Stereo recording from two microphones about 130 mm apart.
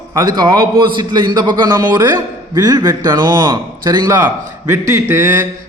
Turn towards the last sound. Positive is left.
turn(degrees=-20)  # may be behind; listen again after turning